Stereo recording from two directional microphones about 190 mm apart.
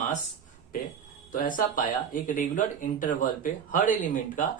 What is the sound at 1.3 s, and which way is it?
Speech, 45° left (ahead or behind).